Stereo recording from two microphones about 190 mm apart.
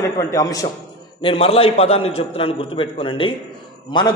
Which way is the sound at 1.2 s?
30° left (ahead or behind).